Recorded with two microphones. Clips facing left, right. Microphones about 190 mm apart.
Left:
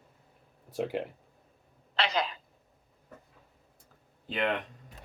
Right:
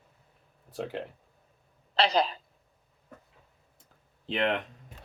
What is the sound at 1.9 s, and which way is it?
Speech, 35° right (ahead or behind).